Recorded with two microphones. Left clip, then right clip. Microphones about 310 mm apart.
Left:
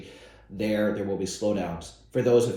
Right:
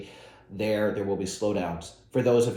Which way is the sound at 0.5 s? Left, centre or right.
Centre.